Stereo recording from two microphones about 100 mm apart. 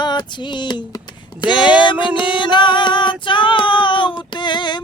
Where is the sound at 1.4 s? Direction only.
50° left (ahead or behind).